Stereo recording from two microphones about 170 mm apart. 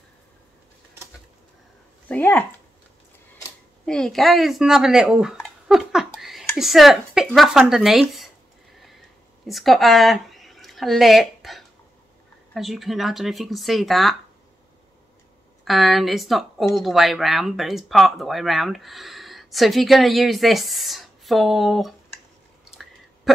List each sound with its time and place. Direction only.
2.0 s speech: 10° left (ahead or behind)
3.8 s speech: 5° left (ahead or behind)
9.5 s speech: centre (ahead or behind)
15.6 s speech: centre (ahead or behind)
23.3 s throat clearing: centre (ahead or behind)